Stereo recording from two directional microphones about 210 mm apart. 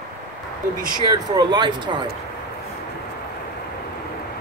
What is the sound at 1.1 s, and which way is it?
Speech, 20° right (ahead or behind).